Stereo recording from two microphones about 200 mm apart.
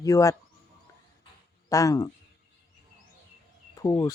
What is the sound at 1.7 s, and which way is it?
Speech, 15° left (ahead or behind).